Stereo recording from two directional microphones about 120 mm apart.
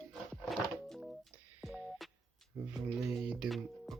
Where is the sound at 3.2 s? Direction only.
Centre (ahead or behind).